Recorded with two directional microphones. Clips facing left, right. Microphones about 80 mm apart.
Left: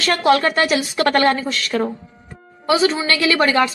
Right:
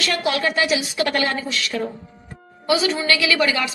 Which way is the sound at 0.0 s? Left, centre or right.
Left.